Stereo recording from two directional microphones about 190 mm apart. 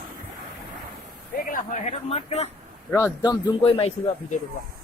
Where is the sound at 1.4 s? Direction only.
45° left (ahead or behind).